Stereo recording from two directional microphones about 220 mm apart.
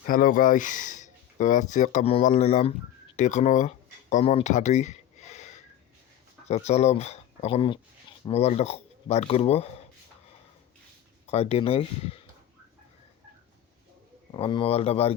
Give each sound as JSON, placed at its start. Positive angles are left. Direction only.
{"t": 0.1, "sound": "speech", "side_deg": 40}
{"t": 3.2, "sound": "a sound", "side_deg": 30}
{"t": 6.5, "sound": "speech", "side_deg": 30}
{"t": 11.3, "sound": "speech", "side_deg": 30}
{"t": 14.3, "sound": "speech", "side_deg": 25}